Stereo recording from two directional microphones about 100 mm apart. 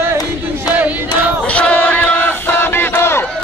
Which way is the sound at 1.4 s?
15° left (ahead or behind).